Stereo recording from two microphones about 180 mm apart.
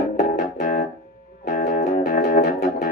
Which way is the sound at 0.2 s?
50° left (ahead or behind).